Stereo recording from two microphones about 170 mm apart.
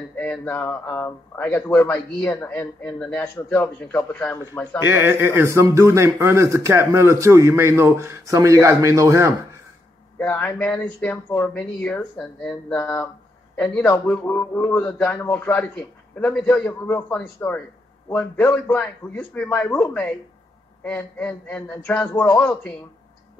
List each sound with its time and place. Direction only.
0.1 s a man's voice: 10° left (ahead or behind)
4.8 s speech: 15° right (ahead or behind)
10.1 s a man's voice: 10° left (ahead or behind)
22.1 s speech: 20° left (ahead or behind)
22.4 s a man's voice: 10° left (ahead or behind)